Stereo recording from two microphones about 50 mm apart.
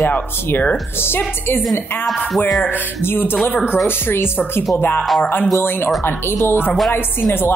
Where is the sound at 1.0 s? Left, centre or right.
Left.